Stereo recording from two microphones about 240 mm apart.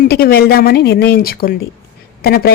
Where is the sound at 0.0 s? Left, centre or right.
Left.